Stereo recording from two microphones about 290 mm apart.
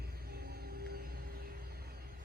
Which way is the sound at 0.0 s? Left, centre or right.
Right.